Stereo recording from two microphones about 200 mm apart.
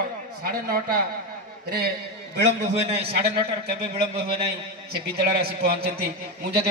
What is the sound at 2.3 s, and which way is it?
Speech, 55° right (ahead or behind).